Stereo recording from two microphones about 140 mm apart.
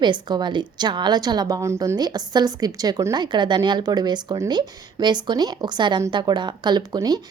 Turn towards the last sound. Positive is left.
turn(degrees=-30)  # may be behind; listen again after turning